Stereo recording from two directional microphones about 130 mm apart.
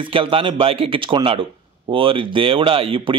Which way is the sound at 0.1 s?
45° right (ahead or behind).